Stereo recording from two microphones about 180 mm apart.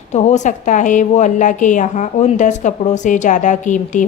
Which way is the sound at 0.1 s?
40° left (ahead or behind).